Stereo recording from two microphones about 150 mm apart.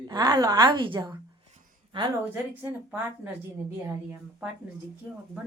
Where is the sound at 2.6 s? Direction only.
15° right (ahead or behind).